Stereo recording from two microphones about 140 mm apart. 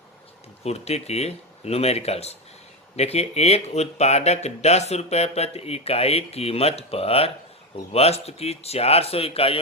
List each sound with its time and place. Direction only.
0.6 s speech: 50° left (ahead or behind)